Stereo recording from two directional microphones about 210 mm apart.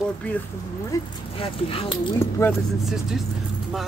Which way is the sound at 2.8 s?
Centre (ahead or behind).